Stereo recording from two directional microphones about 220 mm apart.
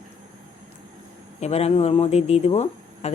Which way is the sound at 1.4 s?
30° left (ahead or behind).